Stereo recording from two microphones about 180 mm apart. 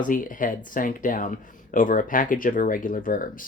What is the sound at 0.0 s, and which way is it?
Speech, 50° left (ahead or behind).